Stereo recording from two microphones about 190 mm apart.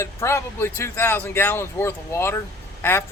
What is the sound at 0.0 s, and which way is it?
Speech, 15° left (ahead or behind).